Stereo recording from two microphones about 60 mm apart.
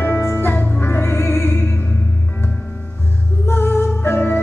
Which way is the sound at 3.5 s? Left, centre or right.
Left.